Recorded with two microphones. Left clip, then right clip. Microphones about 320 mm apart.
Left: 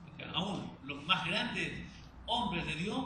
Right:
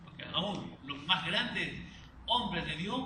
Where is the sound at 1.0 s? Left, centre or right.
Centre.